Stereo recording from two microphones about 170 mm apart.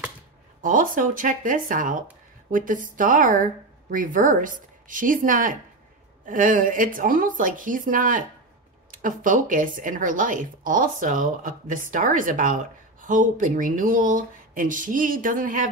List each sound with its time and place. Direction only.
0.6 s a woman's voice: 50° right (ahead or behind)